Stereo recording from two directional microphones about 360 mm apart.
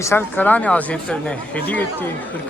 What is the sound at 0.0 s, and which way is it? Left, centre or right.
Speech, centre.